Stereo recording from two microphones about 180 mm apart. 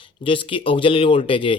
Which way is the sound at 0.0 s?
30° left (ahead or behind).